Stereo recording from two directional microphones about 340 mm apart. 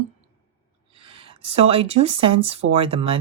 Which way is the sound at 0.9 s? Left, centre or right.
Centre.